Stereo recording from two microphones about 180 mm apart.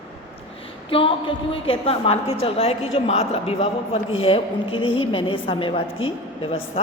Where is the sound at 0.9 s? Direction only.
30° left (ahead or behind).